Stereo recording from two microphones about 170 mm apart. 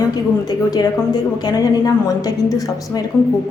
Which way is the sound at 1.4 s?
20° left (ahead or behind).